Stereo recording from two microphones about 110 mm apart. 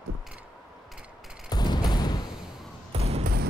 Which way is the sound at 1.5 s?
40° left (ahead or behind).